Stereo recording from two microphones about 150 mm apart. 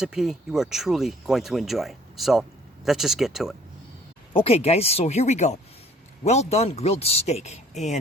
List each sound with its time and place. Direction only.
0.0 s speech: 5° right (ahead or behind)
4.4 s speech: 45° left (ahead or behind)